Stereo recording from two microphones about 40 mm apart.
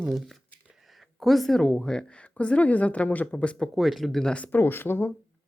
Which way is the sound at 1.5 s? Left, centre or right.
Centre.